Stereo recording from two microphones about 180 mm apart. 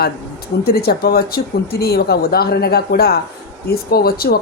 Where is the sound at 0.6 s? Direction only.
60° left (ahead or behind).